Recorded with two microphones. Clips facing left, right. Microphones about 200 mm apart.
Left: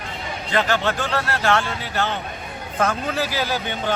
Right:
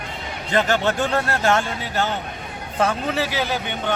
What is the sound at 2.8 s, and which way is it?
Speech, 5° right (ahead or behind).